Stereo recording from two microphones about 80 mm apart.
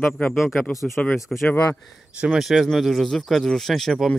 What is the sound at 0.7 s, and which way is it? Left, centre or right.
Speech, left.